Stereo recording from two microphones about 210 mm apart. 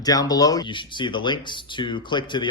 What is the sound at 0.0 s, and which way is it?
Speech, 20° left (ahead or behind).